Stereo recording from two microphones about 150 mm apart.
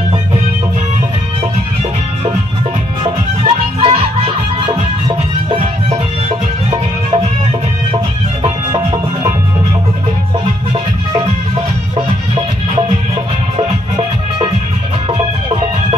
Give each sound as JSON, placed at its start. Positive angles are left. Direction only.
{"t": 3.0, "sound": "music", "side_deg": -35}
{"t": 6.7, "sound": "music", "side_deg": -40}